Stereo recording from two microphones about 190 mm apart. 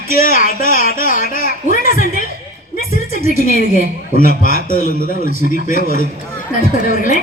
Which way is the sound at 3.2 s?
50° left (ahead or behind).